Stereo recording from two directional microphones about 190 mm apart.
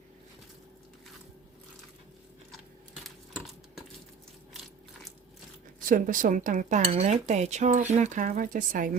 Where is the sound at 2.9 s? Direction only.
Centre (ahead or behind).